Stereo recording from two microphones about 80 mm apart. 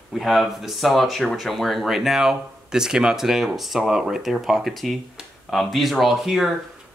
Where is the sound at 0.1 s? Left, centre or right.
Centre.